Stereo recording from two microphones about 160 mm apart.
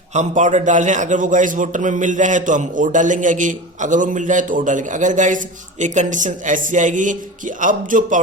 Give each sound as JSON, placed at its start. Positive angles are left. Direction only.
{"t": 0.1, "sound": "a man's voice", "side_deg": -50}